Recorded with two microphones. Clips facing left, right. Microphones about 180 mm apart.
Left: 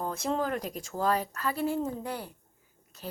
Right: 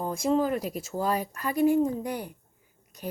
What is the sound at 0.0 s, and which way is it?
Speech, 10° right (ahead or behind).